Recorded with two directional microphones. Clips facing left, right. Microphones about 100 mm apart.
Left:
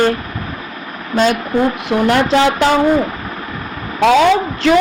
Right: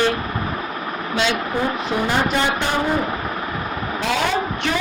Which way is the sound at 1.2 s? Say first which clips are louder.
Left 8 dB; 45° left (ahead or behind).